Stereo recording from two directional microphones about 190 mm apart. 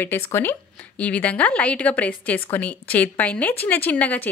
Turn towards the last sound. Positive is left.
turn(degrees=10)  # may be behind; listen again after turning